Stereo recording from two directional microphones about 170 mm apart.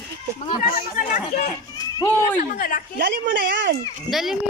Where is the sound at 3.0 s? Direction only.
90° right.